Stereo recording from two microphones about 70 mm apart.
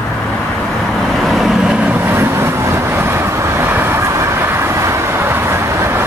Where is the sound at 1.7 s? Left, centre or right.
Right.